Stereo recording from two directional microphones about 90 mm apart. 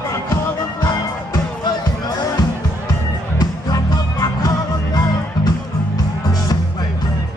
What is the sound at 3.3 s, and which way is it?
Music, 45° left (ahead or behind).